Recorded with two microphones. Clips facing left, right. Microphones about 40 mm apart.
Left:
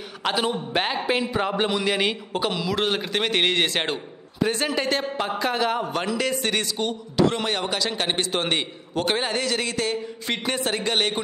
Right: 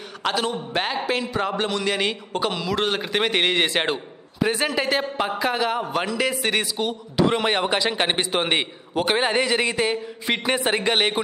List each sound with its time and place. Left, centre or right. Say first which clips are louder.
0.2 s a man's voice: even; centre
7.2 s a man's voice: right 3 dB; right